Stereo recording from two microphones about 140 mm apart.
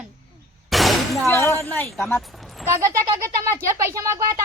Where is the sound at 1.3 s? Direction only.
20° left (ahead or behind).